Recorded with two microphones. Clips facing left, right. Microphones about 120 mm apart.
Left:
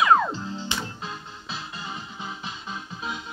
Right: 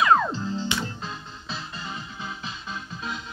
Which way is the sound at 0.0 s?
5° left (ahead or behind).